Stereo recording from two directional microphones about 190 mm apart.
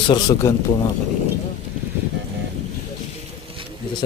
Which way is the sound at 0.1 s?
20° left (ahead or behind).